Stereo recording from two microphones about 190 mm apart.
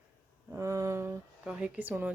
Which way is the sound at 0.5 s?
15° right (ahead or behind).